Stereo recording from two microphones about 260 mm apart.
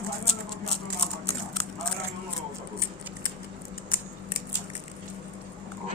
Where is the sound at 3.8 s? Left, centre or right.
Left.